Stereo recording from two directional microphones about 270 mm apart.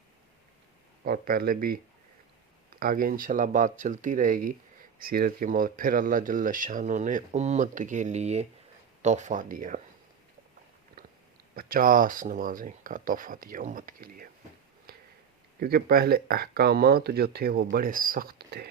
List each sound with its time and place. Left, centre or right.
1.0 s speech: right
11.5 s speech: right
14.9 s finger snapping: right
15.6 s speech: right